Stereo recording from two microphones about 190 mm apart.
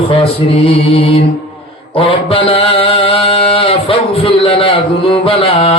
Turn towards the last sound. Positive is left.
turn(degrees=30)  # may be behind; listen again after turning